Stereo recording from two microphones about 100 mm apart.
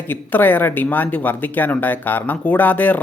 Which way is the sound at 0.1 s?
20° left (ahead or behind).